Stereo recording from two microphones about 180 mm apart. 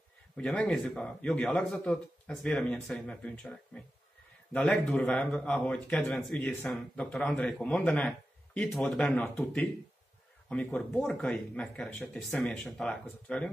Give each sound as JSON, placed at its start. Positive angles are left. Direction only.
{"t": 0.4, "sound": "speech", "side_deg": 5}